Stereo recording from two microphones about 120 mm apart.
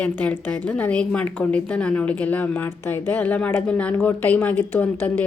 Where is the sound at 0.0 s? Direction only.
10° left (ahead or behind).